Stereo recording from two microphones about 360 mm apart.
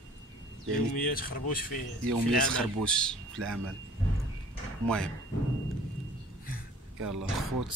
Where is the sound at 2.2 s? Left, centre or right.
Centre.